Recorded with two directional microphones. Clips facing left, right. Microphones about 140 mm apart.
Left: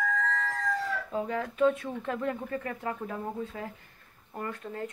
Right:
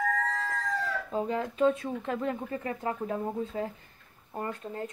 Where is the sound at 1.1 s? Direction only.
25° right (ahead or behind).